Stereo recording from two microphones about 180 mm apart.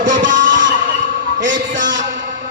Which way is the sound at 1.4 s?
90° right.